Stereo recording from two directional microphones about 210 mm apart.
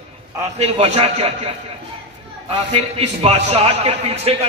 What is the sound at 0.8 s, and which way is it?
Speech, 30° right (ahead or behind).